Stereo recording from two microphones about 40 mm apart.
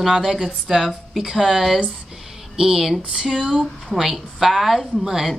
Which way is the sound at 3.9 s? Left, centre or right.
Centre.